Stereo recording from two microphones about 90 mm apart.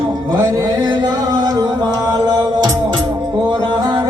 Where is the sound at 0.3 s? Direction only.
40° right (ahead or behind).